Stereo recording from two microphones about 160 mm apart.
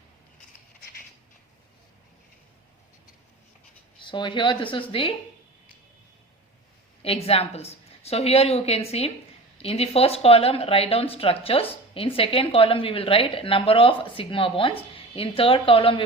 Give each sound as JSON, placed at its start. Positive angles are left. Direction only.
{"t": 4.0, "sound": "speech", "side_deg": 30}
{"t": 7.0, "sound": "speech", "side_deg": 40}